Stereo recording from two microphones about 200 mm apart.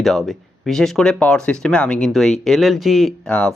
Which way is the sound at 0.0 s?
Centre (ahead or behind).